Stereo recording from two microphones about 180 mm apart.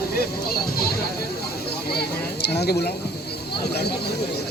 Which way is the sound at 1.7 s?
60° left (ahead or behind).